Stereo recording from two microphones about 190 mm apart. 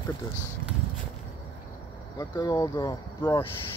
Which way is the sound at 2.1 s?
20° left (ahead or behind).